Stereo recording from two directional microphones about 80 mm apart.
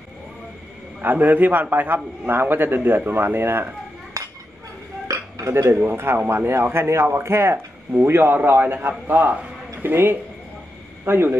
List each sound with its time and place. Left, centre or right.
1.0 s a man's voice: right
3.1 s cutlery: right
5.0 s dishes: right
5.8 s a man's voice: right